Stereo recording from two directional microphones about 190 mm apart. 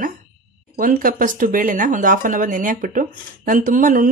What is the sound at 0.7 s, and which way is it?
Speech, 45° right (ahead or behind).